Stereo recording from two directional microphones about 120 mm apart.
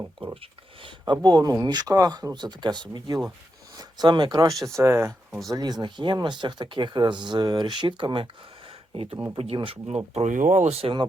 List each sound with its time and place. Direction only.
0.8 s speech: 40° right (ahead or behind)
4.6 s speech: 25° right (ahead or behind)
5.5 s speech: 35° right (ahead or behind)
9.4 s speech: 55° right (ahead or behind)
10.2 s speech: 90° right; by 10.9 s 60° right (ahead or behind)